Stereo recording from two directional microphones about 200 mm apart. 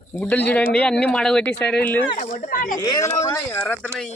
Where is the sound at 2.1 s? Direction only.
40° left (ahead or behind).